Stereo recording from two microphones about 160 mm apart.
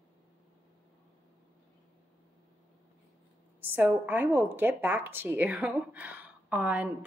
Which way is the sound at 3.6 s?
10° right (ahead or behind).